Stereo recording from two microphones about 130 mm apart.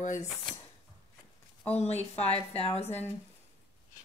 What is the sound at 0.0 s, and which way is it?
Speech, 70° left (ahead or behind).